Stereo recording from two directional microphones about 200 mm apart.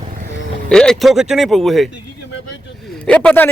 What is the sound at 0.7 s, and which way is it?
Speech, 5° left (ahead or behind).